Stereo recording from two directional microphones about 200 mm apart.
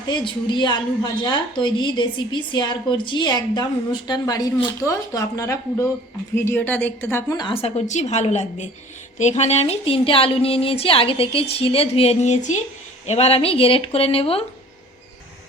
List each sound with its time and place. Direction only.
0.1 s a woman's voice: 25° left (ahead or behind)